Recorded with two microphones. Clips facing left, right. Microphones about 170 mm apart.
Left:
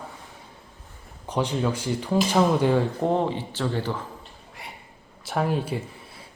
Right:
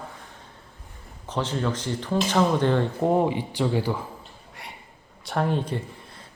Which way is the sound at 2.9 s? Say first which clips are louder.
Right 2 dB; 5° right (ahead or behind).